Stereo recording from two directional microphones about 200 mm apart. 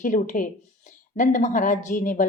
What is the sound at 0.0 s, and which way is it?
A woman's voice, 40° left (ahead or behind).